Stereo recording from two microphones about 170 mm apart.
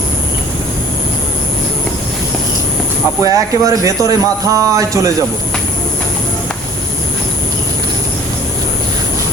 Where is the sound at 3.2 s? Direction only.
20° right (ahead or behind).